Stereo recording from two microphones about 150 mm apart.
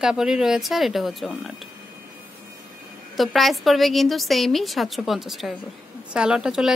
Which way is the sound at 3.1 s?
Centre (ahead or behind).